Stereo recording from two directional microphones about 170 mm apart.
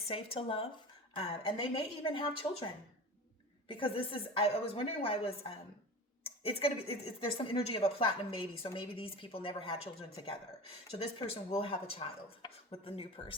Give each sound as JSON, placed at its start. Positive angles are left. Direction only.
{"t": 0.1, "sound": "speech", "side_deg": 35}
{"t": 3.7, "sound": "speech", "side_deg": 30}